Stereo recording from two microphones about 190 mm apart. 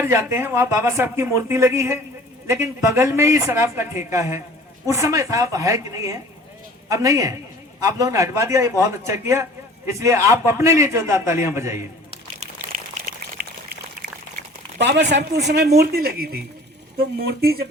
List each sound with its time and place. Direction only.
0.0 s a woman's voice: 15° right (ahead or behind)
12.4 s pour: 40° right (ahead or behind)
13.4 s pour: 55° right (ahead or behind)
14.8 s speech: 65° right (ahead or behind)